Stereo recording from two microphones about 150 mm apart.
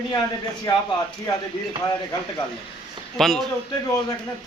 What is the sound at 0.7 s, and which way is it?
Speech, 25° left (ahead or behind).